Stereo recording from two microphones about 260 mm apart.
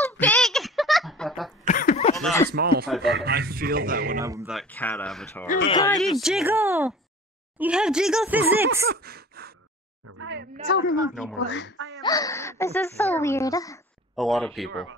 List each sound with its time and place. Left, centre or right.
0.0 s a sound: centre
1.7 s cough: left
2.5 s a man's voice: right
2.9 s speech: centre
3.3 s a man's voice: right
4.2 s speech: centre
4.5 s speech: centre
5.7 s speech: centre
5.9 s speech: centre
8.8 s a sound: right
10.0 s a woman's voice: right
10.7 s speech: left
12.0 s speech: centre
14.1 s speech: centre